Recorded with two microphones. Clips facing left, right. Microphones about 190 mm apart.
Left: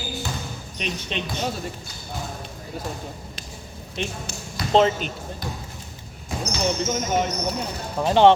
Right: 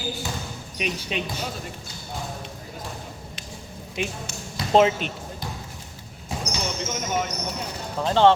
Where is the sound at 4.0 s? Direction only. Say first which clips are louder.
Even; 5° right (ahead or behind).